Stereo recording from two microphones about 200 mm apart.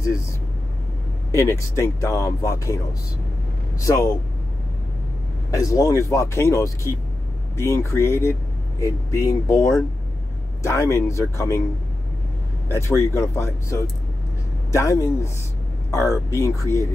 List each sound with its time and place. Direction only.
1.3 s speech: 15° left (ahead or behind)
3.8 s speech: 15° left (ahead or behind)
5.5 s speech: 15° left (ahead or behind)
12.7 s speech: 15° left (ahead or behind)